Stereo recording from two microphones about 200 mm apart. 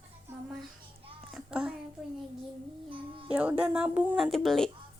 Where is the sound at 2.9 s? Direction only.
25° right (ahead or behind).